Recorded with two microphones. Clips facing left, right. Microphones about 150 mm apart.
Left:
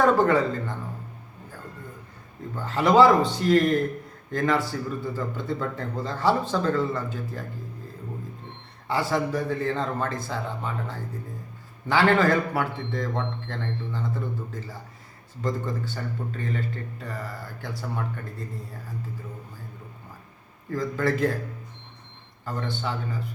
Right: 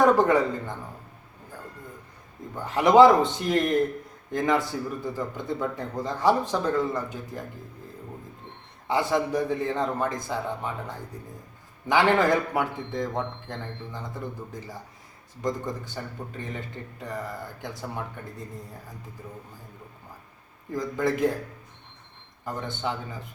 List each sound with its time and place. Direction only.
0.0 s speech: 15° right (ahead or behind)
2.6 s a man's voice: 15° right (ahead or behind)
8.9 s speech: 20° right (ahead or behind)
20.7 s speech: 15° right (ahead or behind)
22.4 s a man's voice: 20° right (ahead or behind)